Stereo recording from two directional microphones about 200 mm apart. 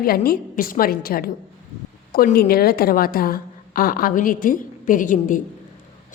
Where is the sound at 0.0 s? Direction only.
50° left (ahead or behind).